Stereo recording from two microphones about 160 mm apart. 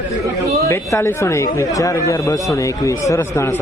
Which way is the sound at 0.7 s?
20° left (ahead or behind).